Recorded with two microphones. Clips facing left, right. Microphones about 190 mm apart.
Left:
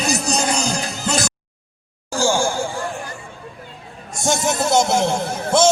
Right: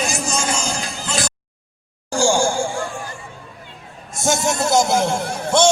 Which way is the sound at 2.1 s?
15° right (ahead or behind).